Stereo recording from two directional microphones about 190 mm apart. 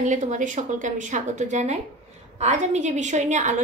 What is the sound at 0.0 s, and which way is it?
A woman's voice, 40° right (ahead or behind).